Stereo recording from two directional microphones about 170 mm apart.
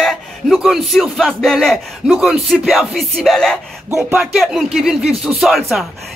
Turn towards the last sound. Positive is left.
turn(degrees=0)  # may be behind; listen again after turning